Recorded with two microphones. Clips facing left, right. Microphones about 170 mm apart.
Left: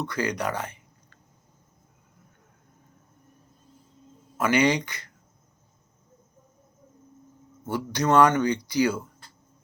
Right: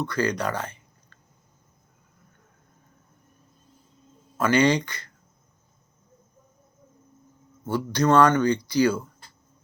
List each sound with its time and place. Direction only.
0.0 s speech: 15° left (ahead or behind)
4.4 s speech: 15° left (ahead or behind)
7.6 s speech: 10° left (ahead or behind)